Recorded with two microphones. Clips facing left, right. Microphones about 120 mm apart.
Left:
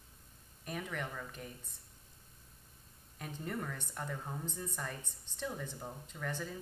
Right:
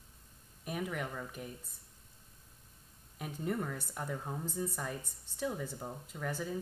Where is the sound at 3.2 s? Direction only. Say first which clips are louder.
Right 4 dB; 10° right (ahead or behind).